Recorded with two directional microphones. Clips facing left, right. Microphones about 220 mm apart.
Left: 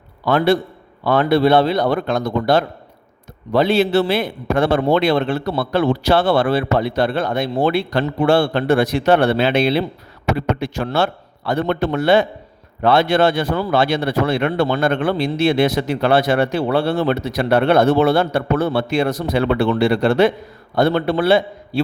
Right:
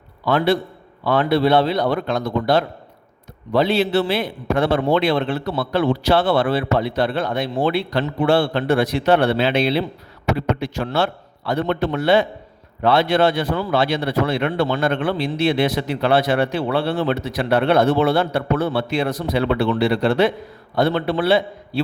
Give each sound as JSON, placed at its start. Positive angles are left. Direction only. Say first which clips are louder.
{"t": 0.3, "sound": "a man's voice", "louder": "left 2 dB", "side_deg": 45}